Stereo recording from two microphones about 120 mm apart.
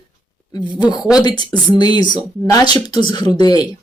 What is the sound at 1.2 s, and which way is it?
A woman's voice, 35° left (ahead or behind).